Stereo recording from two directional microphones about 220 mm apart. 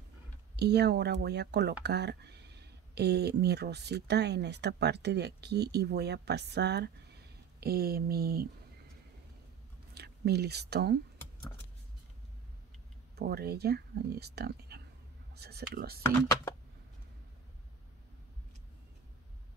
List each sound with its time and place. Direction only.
0.6 s speech: 50° right (ahead or behind)
9.9 s speech: 45° right (ahead or behind)
13.1 s speech: 45° right (ahead or behind)